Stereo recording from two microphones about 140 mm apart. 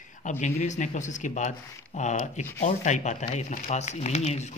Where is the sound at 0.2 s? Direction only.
60° left (ahead or behind).